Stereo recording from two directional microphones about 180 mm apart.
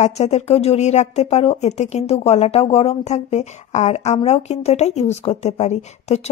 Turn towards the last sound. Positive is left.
turn(degrees=35)  # may be behind; listen again after turning